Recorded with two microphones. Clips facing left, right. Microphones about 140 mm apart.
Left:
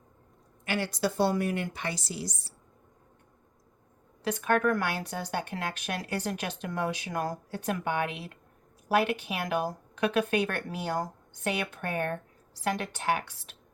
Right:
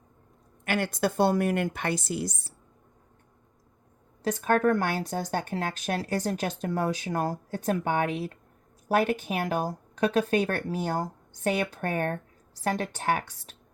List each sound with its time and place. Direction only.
0.6 s speech: 55° right (ahead or behind)
4.2 s speech: 40° right (ahead or behind)